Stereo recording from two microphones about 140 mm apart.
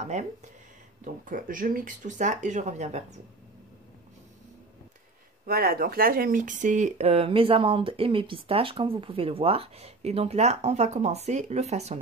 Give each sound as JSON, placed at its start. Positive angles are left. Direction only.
{"t": 0.0, "sound": "speech", "side_deg": -55}
{"t": 1.0, "sound": "speech", "side_deg": -70}
{"t": 5.5, "sound": "speech", "side_deg": -90}